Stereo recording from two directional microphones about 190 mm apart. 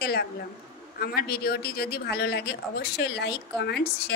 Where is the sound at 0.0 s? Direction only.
55° left (ahead or behind).